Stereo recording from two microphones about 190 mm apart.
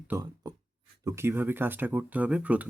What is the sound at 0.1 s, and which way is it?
Speech, 20° right (ahead or behind).